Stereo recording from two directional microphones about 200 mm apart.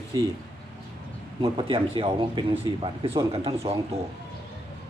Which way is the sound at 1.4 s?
25° right (ahead or behind).